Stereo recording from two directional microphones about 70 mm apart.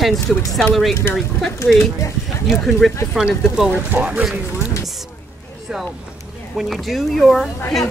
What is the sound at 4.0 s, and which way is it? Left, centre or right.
Speech, right.